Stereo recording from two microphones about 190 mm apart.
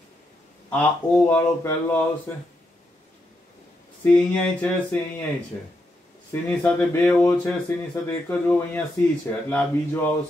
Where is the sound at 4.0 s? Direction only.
10° left (ahead or behind).